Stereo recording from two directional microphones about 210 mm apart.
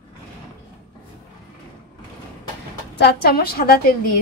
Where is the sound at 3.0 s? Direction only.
50° left (ahead or behind).